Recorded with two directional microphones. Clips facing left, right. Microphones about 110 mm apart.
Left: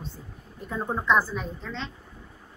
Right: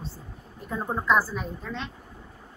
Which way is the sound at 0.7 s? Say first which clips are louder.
Even; 5° right (ahead or behind).